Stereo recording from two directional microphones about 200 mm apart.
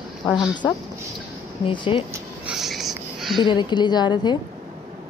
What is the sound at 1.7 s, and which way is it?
Speech, 25° left (ahead or behind).